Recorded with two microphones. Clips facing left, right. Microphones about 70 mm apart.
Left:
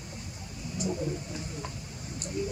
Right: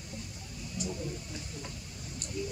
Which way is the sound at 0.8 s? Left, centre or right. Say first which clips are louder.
Left 6 dB; left.